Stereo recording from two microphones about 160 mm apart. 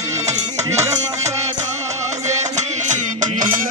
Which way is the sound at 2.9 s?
50° right (ahead or behind).